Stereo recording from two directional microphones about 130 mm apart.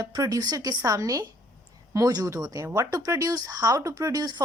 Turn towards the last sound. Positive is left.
turn(degrees=-30)  # may be behind; listen again after turning